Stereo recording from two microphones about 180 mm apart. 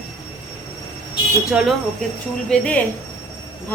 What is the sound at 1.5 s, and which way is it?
A woman's voice, 5° right (ahead or behind).